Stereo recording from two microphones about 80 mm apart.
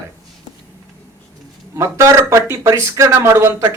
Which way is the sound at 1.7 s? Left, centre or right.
Right.